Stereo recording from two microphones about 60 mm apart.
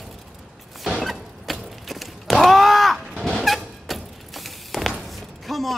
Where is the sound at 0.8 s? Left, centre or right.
Centre.